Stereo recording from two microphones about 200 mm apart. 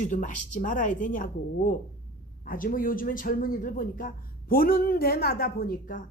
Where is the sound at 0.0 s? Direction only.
40° left (ahead or behind).